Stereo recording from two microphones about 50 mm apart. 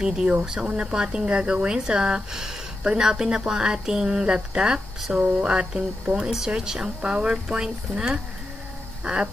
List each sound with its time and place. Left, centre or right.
0.0 s speech: centre